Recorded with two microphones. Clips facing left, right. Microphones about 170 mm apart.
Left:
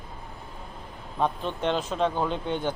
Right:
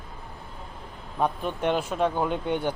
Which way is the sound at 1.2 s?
10° right (ahead or behind).